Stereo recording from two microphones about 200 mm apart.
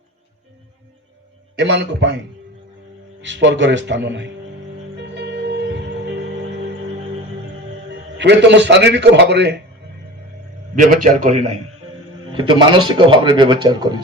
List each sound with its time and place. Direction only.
1.5 s a man's voice: 60° right (ahead or behind)
3.2 s a man's voice: 65° right (ahead or behind)
4.9 s music: 60° right (ahead or behind)
8.2 s a man's voice: 60° right (ahead or behind)
11.2 s a man's voice: 35° right (ahead or behind)
12.3 s speech: 25° right (ahead or behind)